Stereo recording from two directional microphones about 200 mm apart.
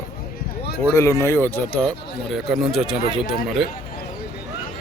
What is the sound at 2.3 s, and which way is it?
A man's voice, centre (ahead or behind).